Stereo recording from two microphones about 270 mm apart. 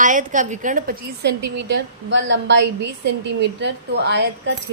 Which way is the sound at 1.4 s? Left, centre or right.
Right.